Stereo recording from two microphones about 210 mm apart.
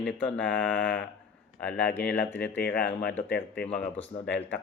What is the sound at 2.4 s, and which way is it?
Speech, 45° left (ahead or behind).